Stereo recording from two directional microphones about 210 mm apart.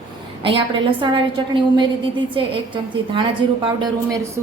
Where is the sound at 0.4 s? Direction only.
25° right (ahead or behind).